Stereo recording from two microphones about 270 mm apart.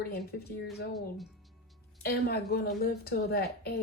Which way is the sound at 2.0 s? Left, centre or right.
Left.